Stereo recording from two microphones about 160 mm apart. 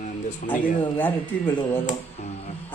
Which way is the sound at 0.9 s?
15° left (ahead or behind).